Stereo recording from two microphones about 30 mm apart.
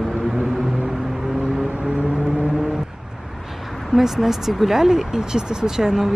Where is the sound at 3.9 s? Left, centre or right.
Centre.